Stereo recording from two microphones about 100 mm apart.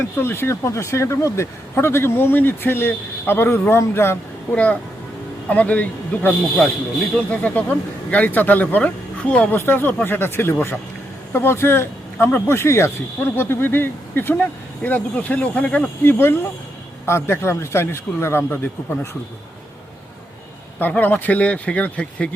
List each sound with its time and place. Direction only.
0.2 s speech: 25° left (ahead or behind)
4.5 s speech: 15° left (ahead or behind)
20.7 s speech: 20° left (ahead or behind)